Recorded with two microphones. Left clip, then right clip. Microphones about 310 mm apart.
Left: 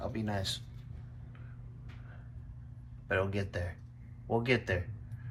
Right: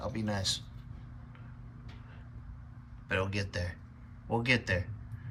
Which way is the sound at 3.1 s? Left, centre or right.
Centre.